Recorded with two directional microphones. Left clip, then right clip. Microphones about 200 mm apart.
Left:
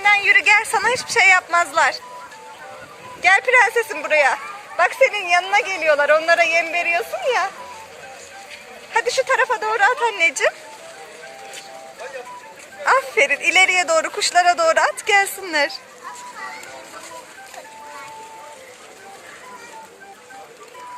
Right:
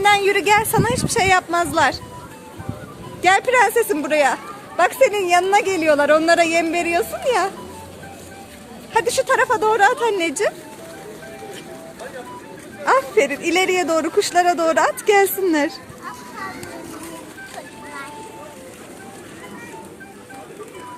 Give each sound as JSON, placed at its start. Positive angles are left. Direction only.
{"t": 0.0, "sound": "speech", "side_deg": -25}
{"t": 3.2, "sound": "a woman's voice", "side_deg": -15}
{"t": 8.9, "sound": "a woman's voice", "side_deg": -15}
{"t": 12.8, "sound": "a man's voice", "side_deg": 0}